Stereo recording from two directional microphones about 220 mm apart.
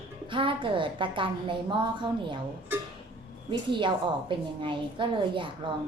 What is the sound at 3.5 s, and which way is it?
A woman's voice, 20° right (ahead or behind).